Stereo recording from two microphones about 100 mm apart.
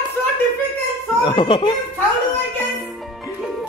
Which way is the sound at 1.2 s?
55° left (ahead or behind).